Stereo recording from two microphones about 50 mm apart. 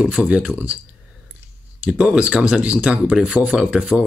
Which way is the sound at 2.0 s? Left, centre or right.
Right.